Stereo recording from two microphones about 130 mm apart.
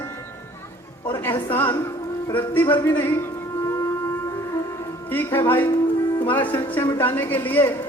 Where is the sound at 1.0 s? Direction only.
20° left (ahead or behind).